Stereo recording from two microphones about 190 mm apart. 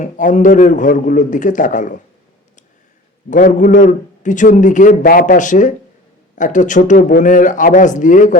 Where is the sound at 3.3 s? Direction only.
45° left (ahead or behind).